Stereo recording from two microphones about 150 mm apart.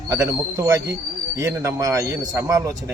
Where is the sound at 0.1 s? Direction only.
20° right (ahead or behind).